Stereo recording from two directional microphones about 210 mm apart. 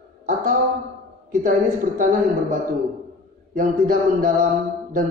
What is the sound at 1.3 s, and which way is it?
Speech, 40° right (ahead or behind).